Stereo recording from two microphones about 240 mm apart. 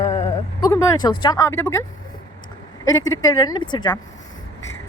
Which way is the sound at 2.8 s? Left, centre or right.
Centre.